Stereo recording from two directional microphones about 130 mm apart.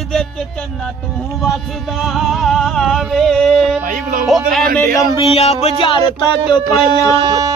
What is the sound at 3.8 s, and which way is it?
Music, 85° right.